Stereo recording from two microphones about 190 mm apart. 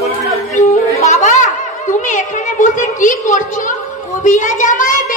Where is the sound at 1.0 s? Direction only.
40° left (ahead or behind).